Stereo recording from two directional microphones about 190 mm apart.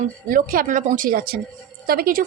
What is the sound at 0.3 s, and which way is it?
Speech, 45° right (ahead or behind).